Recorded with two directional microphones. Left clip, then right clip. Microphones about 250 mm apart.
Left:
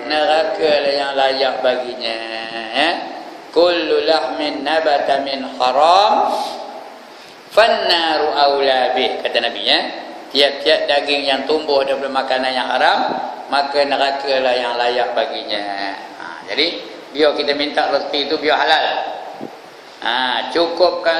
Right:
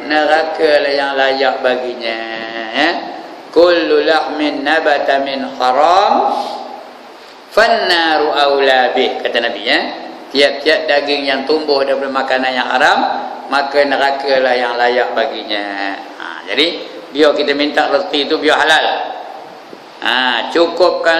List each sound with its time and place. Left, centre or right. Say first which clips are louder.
0.1 s a man's voice: right 3 dB; centre
7.5 s a man's voice: right 2 dB; centre
17.1 s a man's voice: right 4 dB; centre
20.0 s a man's voice: right 4 dB; centre